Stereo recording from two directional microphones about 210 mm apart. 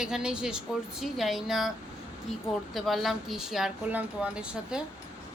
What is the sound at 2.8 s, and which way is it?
Speech, centre (ahead or behind).